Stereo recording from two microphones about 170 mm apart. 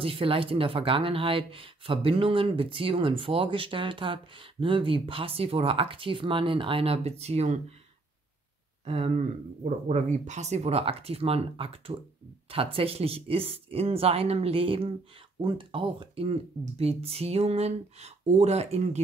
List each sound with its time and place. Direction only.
0.0 s speech: 35° right (ahead or behind)
8.8 s speech: 40° right (ahead or behind)